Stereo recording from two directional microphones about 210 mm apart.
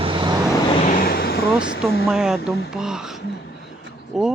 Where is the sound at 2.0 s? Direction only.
Centre (ahead or behind).